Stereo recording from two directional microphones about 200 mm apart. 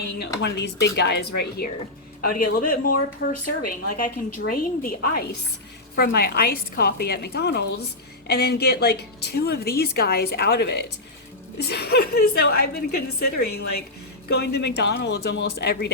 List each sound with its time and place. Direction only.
0.4 s speech: 60° left (ahead or behind)
2.3 s a woman's voice: 45° left (ahead or behind)